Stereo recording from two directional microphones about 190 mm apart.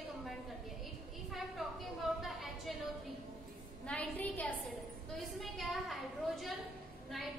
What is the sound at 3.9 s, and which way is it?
A woman's voice, 10° left (ahead or behind).